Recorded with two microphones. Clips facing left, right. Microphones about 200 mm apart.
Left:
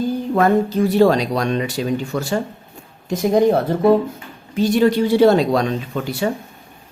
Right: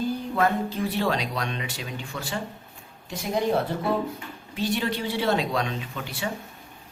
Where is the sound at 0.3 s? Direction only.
45° left (ahead or behind).